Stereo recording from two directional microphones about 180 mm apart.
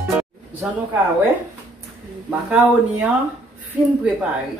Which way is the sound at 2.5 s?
10° right (ahead or behind).